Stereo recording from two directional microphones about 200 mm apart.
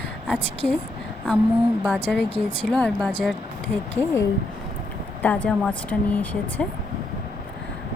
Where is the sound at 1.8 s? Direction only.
5° left (ahead or behind).